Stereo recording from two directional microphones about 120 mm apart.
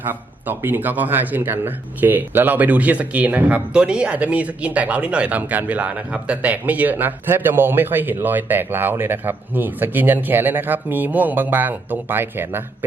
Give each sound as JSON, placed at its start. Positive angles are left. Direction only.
{"t": 0.0, "sound": "speech", "side_deg": -15}